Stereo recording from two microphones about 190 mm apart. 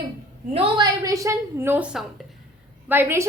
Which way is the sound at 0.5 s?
25° right (ahead or behind).